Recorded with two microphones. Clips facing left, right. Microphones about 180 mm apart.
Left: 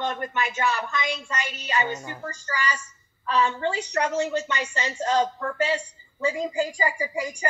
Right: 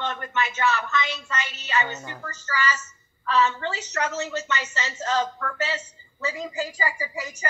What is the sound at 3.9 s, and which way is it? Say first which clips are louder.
Speech: left 3 dB; 30° left (ahead or behind).